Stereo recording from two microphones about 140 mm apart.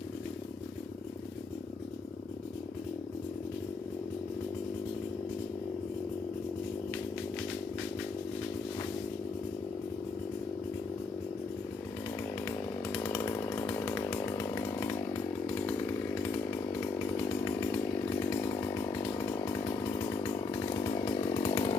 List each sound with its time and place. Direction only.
13.0 s chainsaw: 20° left (ahead or behind)
18.6 s chainsaw: 25° left (ahead or behind)